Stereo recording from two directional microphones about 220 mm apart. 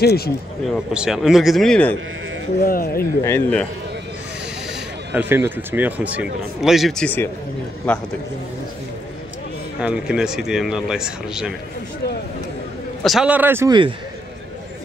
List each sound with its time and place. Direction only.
0.0 s speech: 45° left (ahead or behind)
0.9 s speech: 5° right (ahead or behind)
2.6 s speech: 40° left (ahead or behind)
3.0 s speech: 10° left (ahead or behind)
5.1 s speech: 10° right (ahead or behind); by 8.0 s 5° left (ahead or behind)
9.8 s speech: 5° right (ahead or behind)
13.0 s speech: centre (ahead or behind)